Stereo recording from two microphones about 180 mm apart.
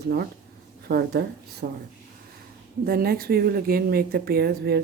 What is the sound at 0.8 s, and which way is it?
Speech, 60° right (ahead or behind).